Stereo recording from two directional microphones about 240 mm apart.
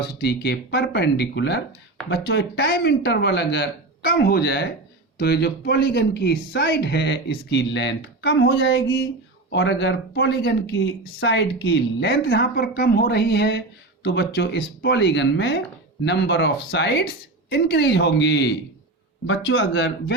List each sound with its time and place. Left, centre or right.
0.2 s speech: left